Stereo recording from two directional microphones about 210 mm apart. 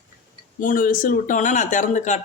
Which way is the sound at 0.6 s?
40° left (ahead or behind).